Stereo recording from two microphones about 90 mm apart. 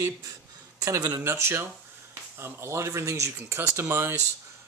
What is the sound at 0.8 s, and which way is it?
Speech, 45° right (ahead or behind).